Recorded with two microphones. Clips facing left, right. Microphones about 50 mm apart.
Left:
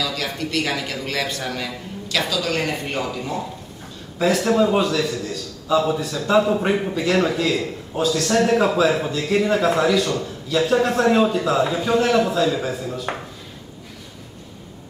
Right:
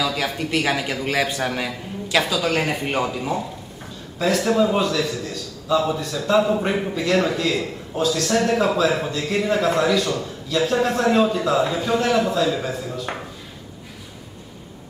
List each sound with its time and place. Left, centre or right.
0.0 s a man's voice: centre